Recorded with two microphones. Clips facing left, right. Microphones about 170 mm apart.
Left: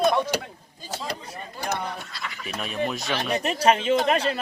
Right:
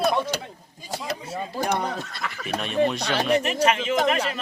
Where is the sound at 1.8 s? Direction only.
45° right (ahead or behind).